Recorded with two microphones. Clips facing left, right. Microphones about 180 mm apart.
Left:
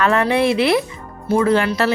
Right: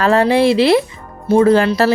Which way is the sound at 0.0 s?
30° right (ahead or behind).